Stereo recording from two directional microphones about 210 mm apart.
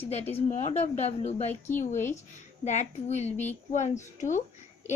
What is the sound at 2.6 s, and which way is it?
A woman's voice, 35° left (ahead or behind).